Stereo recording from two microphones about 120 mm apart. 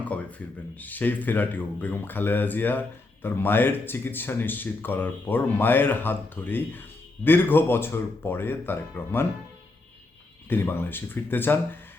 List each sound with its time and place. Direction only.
0.0 s speech: 10° left (ahead or behind)
10.5 s speech: 15° left (ahead or behind)